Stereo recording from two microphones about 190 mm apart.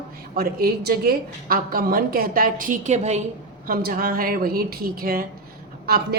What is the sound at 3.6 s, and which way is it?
Speech, 50° right (ahead or behind).